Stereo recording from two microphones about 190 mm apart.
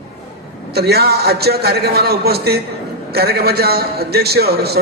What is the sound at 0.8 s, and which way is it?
A man's voice, 55° right (ahead or behind).